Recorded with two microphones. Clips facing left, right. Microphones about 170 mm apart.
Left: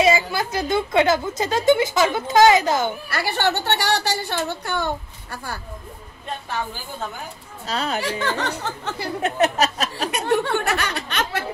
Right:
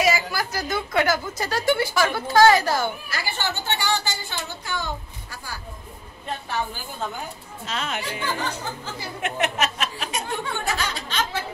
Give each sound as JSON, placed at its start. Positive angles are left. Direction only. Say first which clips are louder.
{"t": 0.0, "sound": "a woman's voice", "louder": "left 4 dB", "side_deg": 25}
{"t": 3.1, "sound": "a woman's voice", "louder": "left 7 dB", "side_deg": 65}
{"t": 7.6, "sound": "a sound", "louder": "left 5 dB", "side_deg": 35}
{"t": 8.3, "sound": "speech", "louder": "left 3 dB", "side_deg": 70}
{"t": 9.2, "sound": "a sound", "louder": "left 5 dB", "side_deg": 35}
{"t": 10.1, "sound": "speech", "louder": "left 11 dB", "side_deg": 70}